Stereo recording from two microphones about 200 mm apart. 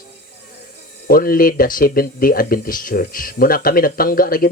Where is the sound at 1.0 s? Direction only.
45° left (ahead or behind).